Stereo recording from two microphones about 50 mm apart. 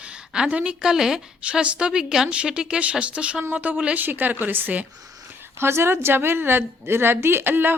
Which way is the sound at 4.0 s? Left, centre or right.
Right.